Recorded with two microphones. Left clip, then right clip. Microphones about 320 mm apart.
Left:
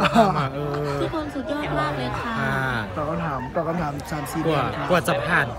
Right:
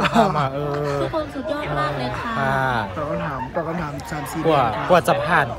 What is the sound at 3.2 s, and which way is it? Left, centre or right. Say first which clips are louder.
Speech: even; centre.